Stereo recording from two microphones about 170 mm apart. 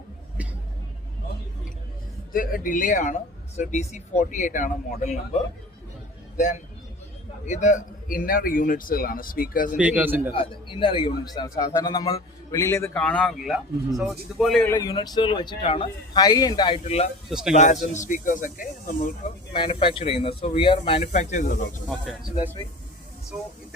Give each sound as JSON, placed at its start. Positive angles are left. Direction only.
{"t": 2.3, "sound": "speech", "side_deg": 55}
{"t": 6.3, "sound": "a man's voice", "side_deg": 45}
{"t": 9.7, "sound": "speech", "side_deg": -10}
{"t": 10.3, "sound": "speech", "side_deg": 30}
{"t": 14.7, "sound": "speech", "side_deg": 20}
{"t": 17.2, "sound": "speech", "side_deg": -5}
{"t": 17.5, "sound": "speech", "side_deg": 45}
{"t": 19.5, "sound": "speech", "side_deg": 30}